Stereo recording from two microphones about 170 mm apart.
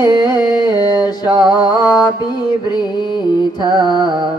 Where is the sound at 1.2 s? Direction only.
25° right (ahead or behind).